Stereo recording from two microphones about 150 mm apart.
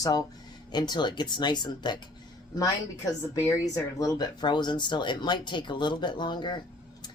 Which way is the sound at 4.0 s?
25° left (ahead or behind).